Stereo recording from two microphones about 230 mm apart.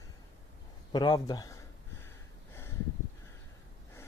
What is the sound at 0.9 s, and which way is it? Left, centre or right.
Speech, centre.